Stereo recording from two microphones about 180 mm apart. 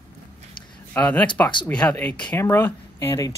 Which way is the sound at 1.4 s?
25° left (ahead or behind).